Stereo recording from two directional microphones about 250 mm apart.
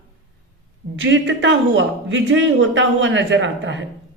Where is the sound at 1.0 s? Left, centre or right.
Right.